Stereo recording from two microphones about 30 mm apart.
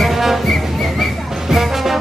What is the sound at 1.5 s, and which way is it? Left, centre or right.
Music, centre.